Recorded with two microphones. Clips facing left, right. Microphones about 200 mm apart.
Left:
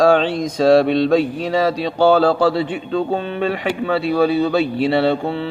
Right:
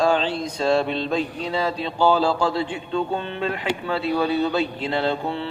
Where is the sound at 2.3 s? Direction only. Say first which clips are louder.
Left 6 dB; 85° left.